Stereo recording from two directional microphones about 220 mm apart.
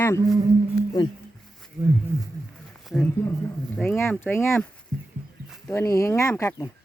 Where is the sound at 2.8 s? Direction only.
Centre (ahead or behind).